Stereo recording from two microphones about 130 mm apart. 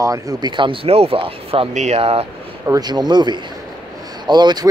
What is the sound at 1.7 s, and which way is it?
Speech, 65° right (ahead or behind).